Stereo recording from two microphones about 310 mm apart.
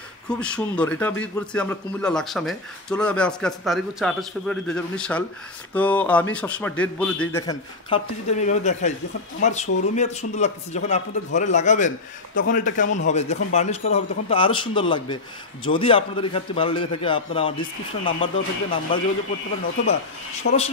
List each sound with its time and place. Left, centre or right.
0.3 s a man's voice: centre
20.4 s speech: left